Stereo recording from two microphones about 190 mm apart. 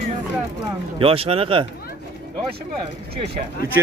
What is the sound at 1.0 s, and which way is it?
Speech, 30° right (ahead or behind).